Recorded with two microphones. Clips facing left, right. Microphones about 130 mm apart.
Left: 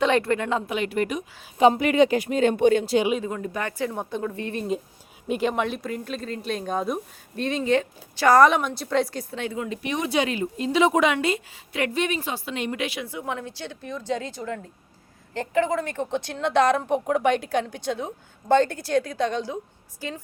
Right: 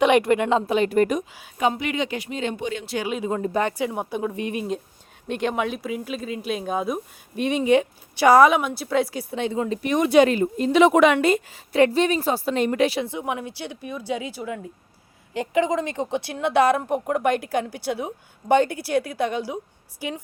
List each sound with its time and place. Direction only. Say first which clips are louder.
0.0 s a woman's voice: right 4 dB; 15° right (ahead or behind)
0.7 s speech: right 6 dB; 40° right (ahead or behind)
1.5 s speech: left 5 dB; 30° left (ahead or behind)
1.8 s speech: left 7 dB; 45° left (ahead or behind)
3.2 s speech: right 6 dB; 30° right (ahead or behind)
5.3 s speech: even; centre (ahead or behind)
9.3 s speech: right 5 dB; 20° right (ahead or behind)
9.8 s speech: right 9 dB; 50° right (ahead or behind)
11.7 s a woman's voice: right 7 dB; 35° right (ahead or behind)
13.1 s speech: right 3 dB; 20° right (ahead or behind)